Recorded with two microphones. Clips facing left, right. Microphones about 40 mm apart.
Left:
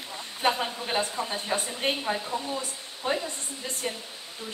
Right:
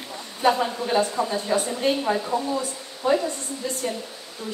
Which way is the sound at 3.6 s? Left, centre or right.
Centre.